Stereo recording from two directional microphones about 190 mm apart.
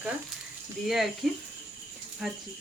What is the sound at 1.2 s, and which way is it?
Speech, centre (ahead or behind).